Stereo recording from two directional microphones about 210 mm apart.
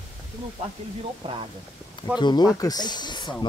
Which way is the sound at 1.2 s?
25° right (ahead or behind).